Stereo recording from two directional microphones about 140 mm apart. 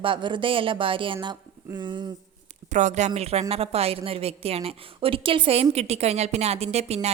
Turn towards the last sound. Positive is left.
turn(degrees=-50)  # may be behind; listen again after turning